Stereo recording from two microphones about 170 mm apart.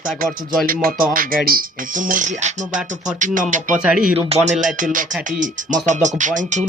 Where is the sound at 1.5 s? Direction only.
55° right (ahead or behind).